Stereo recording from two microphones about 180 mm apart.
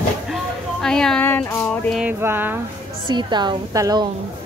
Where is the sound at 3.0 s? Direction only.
25° right (ahead or behind).